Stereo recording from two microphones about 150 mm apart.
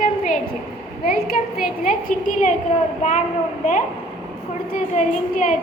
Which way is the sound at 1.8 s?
65° left (ahead or behind).